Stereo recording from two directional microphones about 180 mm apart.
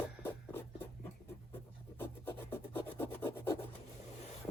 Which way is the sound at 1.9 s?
10° left (ahead or behind).